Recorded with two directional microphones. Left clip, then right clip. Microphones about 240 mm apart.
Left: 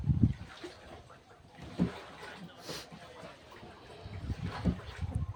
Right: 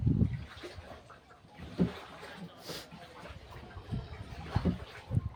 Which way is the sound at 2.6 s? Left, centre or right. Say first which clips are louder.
Left 1 dB; centre.